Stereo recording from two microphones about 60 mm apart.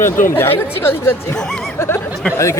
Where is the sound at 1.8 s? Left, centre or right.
Left.